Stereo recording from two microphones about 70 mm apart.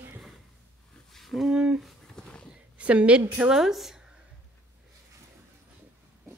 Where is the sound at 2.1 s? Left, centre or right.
Centre.